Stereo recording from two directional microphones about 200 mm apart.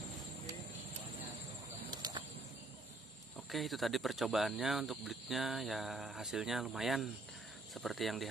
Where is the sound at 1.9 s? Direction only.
20° right (ahead or behind).